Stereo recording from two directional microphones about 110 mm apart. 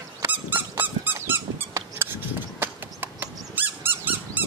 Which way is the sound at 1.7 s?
25° right (ahead or behind).